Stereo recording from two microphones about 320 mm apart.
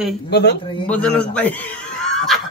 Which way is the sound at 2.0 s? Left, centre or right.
Centre.